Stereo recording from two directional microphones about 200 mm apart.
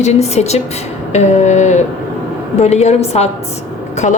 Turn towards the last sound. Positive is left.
turn(degrees=35)  # may be behind; listen again after turning